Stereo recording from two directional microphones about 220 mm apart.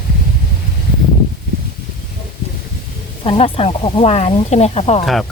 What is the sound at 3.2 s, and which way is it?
Speech, 25° left (ahead or behind).